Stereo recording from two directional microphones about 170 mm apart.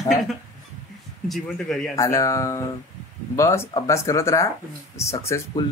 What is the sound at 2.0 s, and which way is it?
Speech, 20° left (ahead or behind).